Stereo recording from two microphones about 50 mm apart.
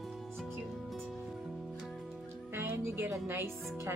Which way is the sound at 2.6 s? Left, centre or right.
Right.